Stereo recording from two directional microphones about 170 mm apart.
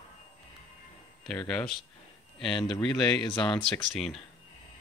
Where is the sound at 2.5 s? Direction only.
30° left (ahead or behind).